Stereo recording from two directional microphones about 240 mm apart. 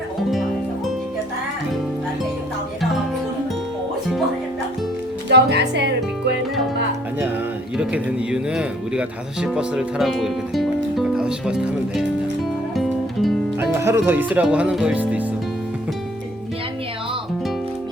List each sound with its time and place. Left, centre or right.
5.3 s music: right
7.8 s speech: centre
12.7 s music: centre